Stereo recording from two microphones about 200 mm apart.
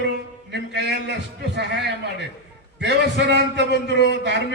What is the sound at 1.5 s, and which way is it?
A man's voice, 55° right (ahead or behind).